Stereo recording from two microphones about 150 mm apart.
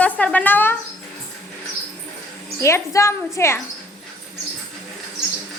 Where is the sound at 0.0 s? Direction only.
10° left (ahead or behind).